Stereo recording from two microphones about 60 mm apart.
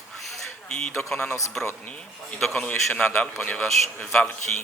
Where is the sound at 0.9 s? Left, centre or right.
Centre.